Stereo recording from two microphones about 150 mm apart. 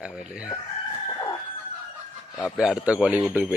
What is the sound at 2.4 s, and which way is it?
Speech, 5° right (ahead or behind).